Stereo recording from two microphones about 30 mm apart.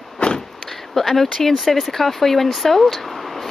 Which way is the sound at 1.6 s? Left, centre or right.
Centre.